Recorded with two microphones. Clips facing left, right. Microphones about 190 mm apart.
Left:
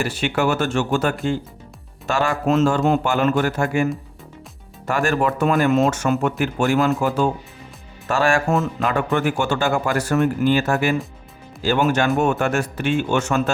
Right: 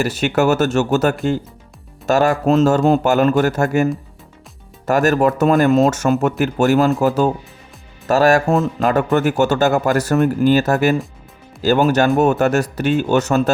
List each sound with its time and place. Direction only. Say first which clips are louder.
0.0 s speech: right 4 dB; 40° right (ahead or behind)
4.9 s speech: right 5 dB; 40° right (ahead or behind)